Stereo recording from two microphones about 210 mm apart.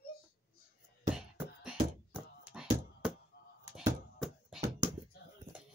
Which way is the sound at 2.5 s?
5° right (ahead or behind).